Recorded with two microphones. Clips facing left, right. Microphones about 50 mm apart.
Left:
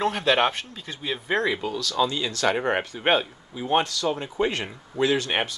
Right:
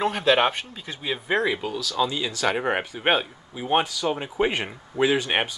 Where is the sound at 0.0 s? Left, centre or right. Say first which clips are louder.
Right 1 dB; centre.